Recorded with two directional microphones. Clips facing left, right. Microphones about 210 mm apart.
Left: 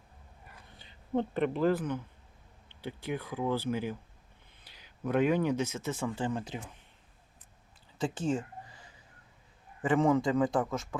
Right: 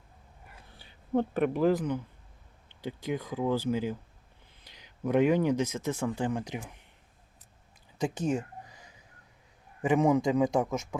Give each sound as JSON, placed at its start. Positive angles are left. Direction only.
{"t": 0.8, "sound": "speech", "side_deg": -10}
{"t": 8.0, "sound": "speech", "side_deg": -20}
{"t": 9.8, "sound": "speech", "side_deg": -15}